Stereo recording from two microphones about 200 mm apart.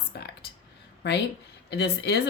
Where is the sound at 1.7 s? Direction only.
55° left (ahead or behind).